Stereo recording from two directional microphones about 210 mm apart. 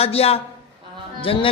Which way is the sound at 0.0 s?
30° left (ahead or behind).